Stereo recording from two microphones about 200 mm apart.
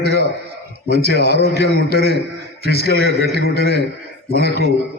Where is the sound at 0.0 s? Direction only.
55° right (ahead or behind).